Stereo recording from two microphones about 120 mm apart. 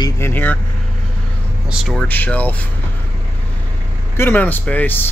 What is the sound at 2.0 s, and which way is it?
Speech, 15° left (ahead or behind).